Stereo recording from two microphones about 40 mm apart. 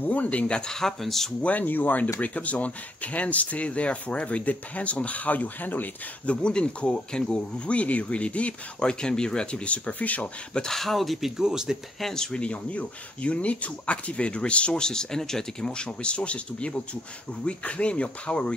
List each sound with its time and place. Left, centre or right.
0.0 s speech: left
0.6 s speech: centre
1.4 s speech: left
6.2 s speech: left
8.7 s speech: left
10.7 s speech: centre
12.0 s speech: centre
12.4 s speech: left